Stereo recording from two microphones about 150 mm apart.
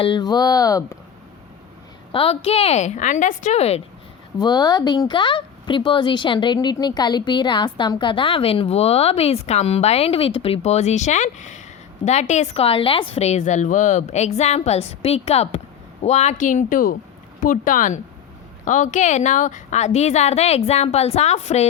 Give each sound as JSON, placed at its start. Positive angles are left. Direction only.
{"t": 0.0, "sound": "speech", "side_deg": 30}
{"t": 2.1, "sound": "a woman's voice", "side_deg": 40}
{"t": 4.4, "sound": "a woman's voice", "side_deg": 25}